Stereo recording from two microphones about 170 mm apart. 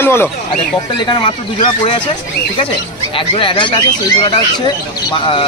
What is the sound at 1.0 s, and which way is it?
Speech, 25° left (ahead or behind).